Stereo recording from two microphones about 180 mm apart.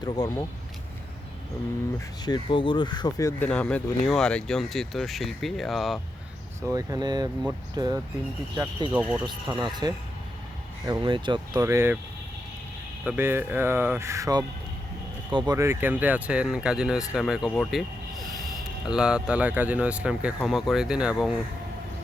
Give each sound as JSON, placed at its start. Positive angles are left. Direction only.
{"t": 0.0, "sound": "speech", "side_deg": 20}
{"t": 2.2, "sound": "speech", "side_deg": 25}
{"t": 3.5, "sound": "speech", "side_deg": 5}
{"t": 6.6, "sound": "speech", "side_deg": -20}
{"t": 8.9, "sound": "speech", "side_deg": -10}
{"t": 9.5, "sound": "speech", "side_deg": -25}
{"t": 10.8, "sound": "speech", "side_deg": -25}
{"t": 13.1, "sound": "speech", "side_deg": -10}
{"t": 15.5, "sound": "speech", "side_deg": -15}
{"t": 17.5, "sound": "a sound", "side_deg": 5}
{"t": 18.9, "sound": "speech", "side_deg": -5}